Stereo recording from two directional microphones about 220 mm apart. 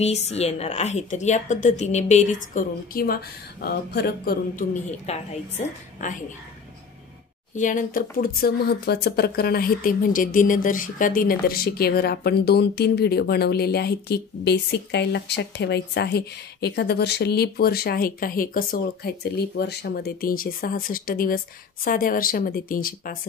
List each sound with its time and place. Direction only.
0.0 s a woman's voice: 30° left (ahead or behind)
5.1 s a woman's voice: 30° left (ahead or behind)
7.5 s a woman's voice: 35° left (ahead or behind)